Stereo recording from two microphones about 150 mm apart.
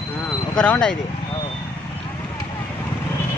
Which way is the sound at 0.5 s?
5° left (ahead or behind).